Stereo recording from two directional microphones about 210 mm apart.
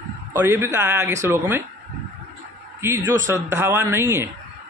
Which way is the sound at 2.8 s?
10° right (ahead or behind).